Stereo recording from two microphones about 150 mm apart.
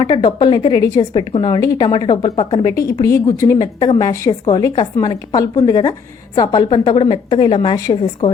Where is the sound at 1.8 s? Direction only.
35° left (ahead or behind).